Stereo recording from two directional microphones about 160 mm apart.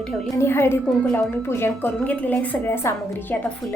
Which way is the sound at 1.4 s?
15° left (ahead or behind).